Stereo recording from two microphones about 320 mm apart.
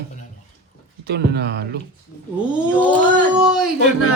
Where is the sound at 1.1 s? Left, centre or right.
Right.